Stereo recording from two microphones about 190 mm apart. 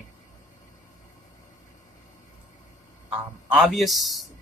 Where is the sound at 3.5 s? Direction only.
Centre (ahead or behind).